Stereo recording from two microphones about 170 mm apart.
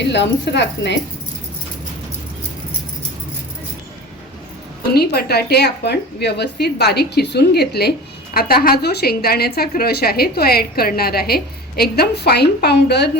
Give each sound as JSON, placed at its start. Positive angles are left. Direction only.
{"t": 0.0, "sound": "speech", "side_deg": 90}
{"t": 4.9, "sound": "a woman's voice", "side_deg": 65}